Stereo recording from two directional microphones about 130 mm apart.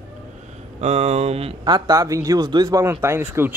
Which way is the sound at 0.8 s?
55° right (ahead or behind).